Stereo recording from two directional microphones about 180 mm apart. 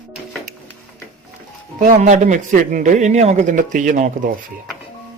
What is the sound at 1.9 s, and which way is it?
A man's voice, 40° right (ahead or behind).